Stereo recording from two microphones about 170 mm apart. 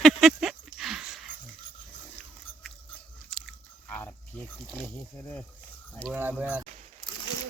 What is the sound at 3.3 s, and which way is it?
Biting, 5° left (ahead or behind).